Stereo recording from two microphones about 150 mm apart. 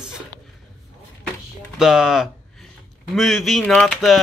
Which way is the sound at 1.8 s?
5° right (ahead or behind).